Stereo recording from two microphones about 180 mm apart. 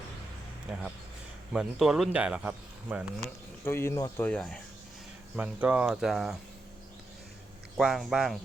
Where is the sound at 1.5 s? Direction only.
Centre (ahead or behind).